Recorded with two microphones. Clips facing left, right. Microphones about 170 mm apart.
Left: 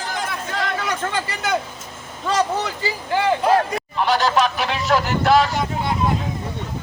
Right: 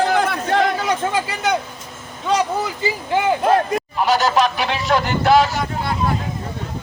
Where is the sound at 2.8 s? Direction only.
20° right (ahead or behind).